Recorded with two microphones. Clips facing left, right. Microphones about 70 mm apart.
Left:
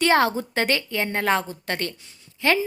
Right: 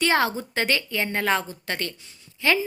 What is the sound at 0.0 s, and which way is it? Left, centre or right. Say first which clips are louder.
A woman's voice: left 3 dB; left.